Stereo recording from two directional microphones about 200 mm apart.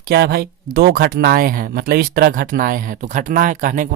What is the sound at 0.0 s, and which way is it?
Speech, 50° right (ahead or behind).